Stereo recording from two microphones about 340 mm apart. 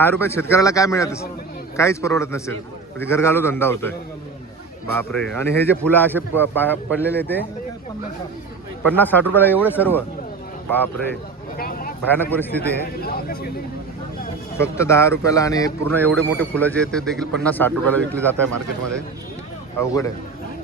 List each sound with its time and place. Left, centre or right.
0.0 s a man's voice: centre
8.8 s speech: centre
11.1 s a sound: left
12.1 s speech: centre
13.0 s speech: left
14.5 s a man's voice: centre
19.8 s a man's voice: centre